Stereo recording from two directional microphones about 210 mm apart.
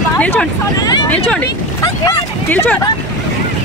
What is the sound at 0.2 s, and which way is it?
Speech, 5° left (ahead or behind).